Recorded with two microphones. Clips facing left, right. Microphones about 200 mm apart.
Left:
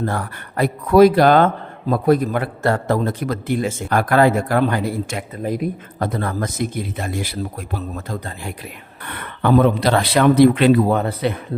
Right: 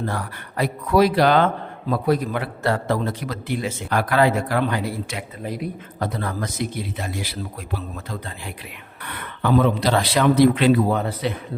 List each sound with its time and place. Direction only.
0.0 s a man's voice: 50° left (ahead or behind)